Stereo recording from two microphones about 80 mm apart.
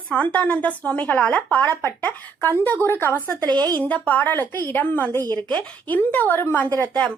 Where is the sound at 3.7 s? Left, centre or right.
Centre.